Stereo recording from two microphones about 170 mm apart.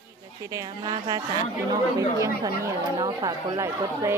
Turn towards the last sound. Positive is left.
turn(degrees=-20)  # may be behind; listen again after turning